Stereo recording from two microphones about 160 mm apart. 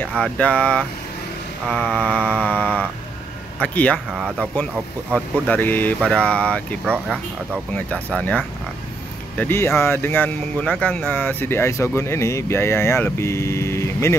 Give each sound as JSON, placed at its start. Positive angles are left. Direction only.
{"t": 0.0, "sound": "speech", "side_deg": 5}
{"t": 4.1, "sound": "speech", "side_deg": -5}
{"t": 5.1, "sound": "speech", "side_deg": 10}
{"t": 6.9, "sound": "speech", "side_deg": -10}
{"t": 7.7, "sound": "speech", "side_deg": 10}